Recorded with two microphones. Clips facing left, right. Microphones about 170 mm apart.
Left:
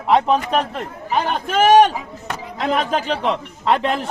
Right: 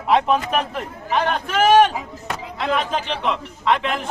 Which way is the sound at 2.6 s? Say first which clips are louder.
Left 3 dB; 40° left (ahead or behind).